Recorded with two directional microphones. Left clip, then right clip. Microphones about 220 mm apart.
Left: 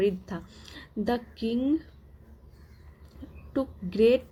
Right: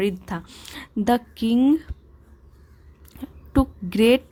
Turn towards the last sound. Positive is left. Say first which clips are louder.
# right 4 dB
turn(degrees=-30)  # may be behind; listen again after turning